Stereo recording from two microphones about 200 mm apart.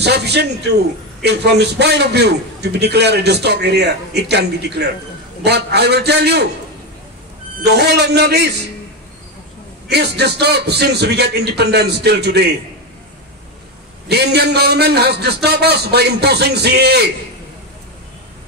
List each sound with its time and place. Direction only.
0.0 s a man's voice: 55° right (ahead or behind)
7.6 s a man's voice: 55° right (ahead or behind)
9.8 s a man's voice: 55° right (ahead or behind)
14.0 s a man's voice: 55° right (ahead or behind)